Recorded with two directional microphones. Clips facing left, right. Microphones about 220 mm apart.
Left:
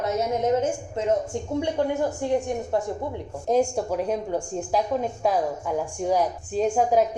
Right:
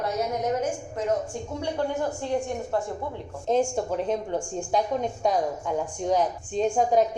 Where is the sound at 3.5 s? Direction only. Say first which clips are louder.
Left 2 dB; 10° left (ahead or behind).